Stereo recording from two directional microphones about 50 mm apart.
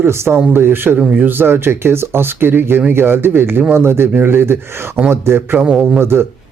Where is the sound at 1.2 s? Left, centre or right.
Right.